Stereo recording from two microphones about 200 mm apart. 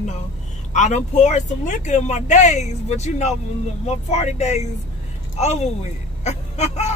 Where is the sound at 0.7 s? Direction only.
35° left (ahead or behind).